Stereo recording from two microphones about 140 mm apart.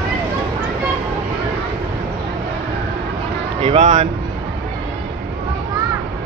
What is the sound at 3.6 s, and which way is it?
Music, 40° right (ahead or behind).